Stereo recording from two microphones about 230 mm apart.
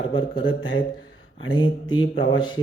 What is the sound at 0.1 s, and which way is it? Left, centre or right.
Speech, left.